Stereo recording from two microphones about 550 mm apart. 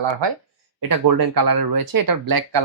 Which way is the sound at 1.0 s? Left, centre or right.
Right.